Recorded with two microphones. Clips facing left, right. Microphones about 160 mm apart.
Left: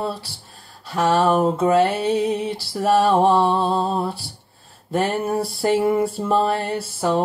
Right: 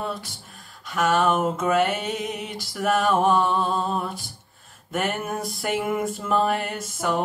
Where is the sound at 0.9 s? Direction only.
35° left (ahead or behind).